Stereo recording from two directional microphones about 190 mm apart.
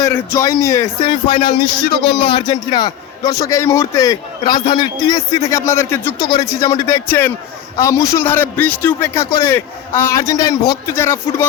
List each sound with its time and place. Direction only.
0.0 s a man's voice: 15° left (ahead or behind)